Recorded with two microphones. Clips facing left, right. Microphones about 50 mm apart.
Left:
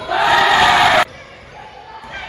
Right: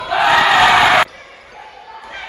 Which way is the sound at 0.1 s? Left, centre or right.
Centre.